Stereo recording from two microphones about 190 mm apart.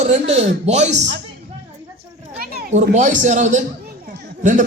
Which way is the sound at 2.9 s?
40° right (ahead or behind).